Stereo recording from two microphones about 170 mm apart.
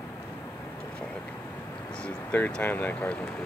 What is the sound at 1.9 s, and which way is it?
Speech, 5° left (ahead or behind).